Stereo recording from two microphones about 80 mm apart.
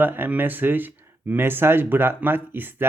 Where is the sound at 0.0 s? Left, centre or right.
Right.